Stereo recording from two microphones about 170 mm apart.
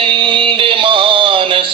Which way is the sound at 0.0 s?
30° right (ahead or behind).